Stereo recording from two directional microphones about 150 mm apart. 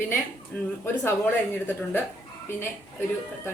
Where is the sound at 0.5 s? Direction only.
10° left (ahead or behind).